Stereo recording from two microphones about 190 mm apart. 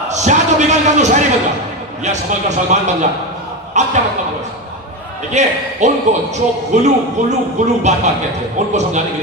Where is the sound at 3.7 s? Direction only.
40° right (ahead or behind).